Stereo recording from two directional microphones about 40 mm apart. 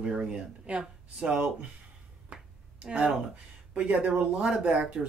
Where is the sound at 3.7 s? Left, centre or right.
Right.